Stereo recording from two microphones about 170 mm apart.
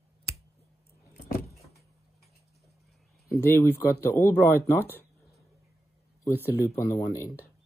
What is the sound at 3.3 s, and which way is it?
Speech, 15° left (ahead or behind).